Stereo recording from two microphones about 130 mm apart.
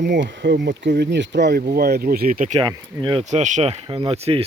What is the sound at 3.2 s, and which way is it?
Speech, 65° right (ahead or behind).